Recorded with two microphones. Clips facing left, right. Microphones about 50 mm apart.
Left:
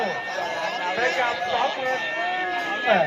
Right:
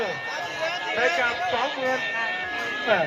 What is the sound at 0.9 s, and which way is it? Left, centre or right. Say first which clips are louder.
Speech: right 2 dB; right.